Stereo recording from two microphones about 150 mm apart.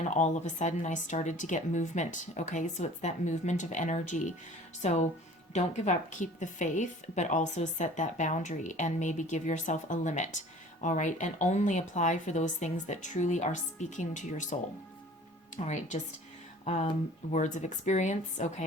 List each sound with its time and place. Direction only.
0.1 s a woman's voice: 50° left (ahead or behind)